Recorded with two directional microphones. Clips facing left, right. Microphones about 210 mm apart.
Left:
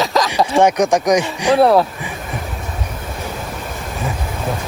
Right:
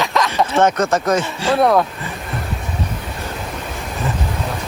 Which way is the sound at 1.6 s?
5° left (ahead or behind).